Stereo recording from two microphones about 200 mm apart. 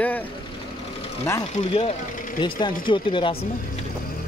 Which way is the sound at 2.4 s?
25° left (ahead or behind).